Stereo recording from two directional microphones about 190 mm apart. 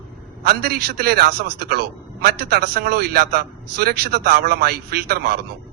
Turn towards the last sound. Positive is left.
turn(degrees=-55)  # may be behind; listen again after turning